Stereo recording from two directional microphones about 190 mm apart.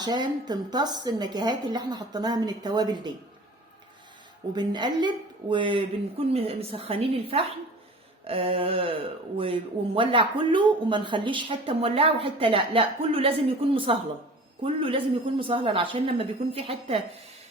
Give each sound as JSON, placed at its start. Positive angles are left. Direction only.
{"t": 0.0, "sound": "speech", "side_deg": -20}
{"t": 4.5, "sound": "speech", "side_deg": -25}